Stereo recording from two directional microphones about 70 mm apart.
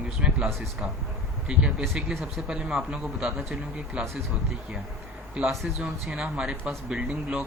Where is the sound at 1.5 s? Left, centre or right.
Centre.